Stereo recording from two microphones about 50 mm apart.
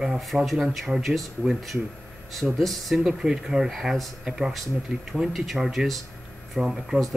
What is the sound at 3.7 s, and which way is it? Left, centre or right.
Speech, centre.